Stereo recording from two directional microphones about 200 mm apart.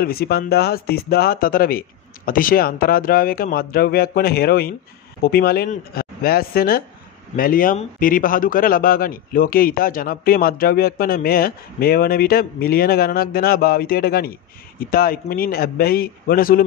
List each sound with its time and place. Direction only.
0.0 s a man's voice: 50° left (ahead or behind)